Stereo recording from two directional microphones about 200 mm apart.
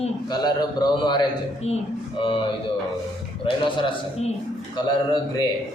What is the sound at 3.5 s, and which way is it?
Speech, 25° left (ahead or behind).